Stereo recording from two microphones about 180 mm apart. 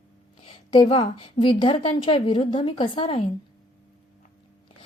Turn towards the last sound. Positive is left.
turn(degrees=30)  # may be behind; listen again after turning